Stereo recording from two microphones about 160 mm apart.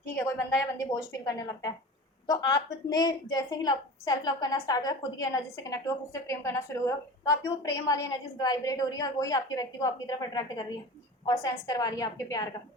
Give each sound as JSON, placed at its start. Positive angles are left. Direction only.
{"t": 0.0, "sound": "a woman's voice", "side_deg": 20}